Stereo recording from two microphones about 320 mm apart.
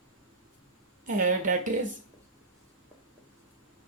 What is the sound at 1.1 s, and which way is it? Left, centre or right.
Speech, right.